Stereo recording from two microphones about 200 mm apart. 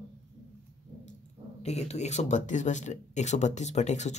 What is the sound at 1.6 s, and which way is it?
Speech, 35° left (ahead or behind).